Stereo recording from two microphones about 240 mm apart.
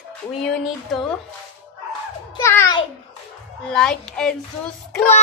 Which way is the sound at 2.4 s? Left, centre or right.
Centre.